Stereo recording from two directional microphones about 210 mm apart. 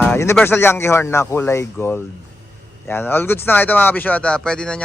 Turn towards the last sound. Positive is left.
turn(degrees=5)  # may be behind; listen again after turning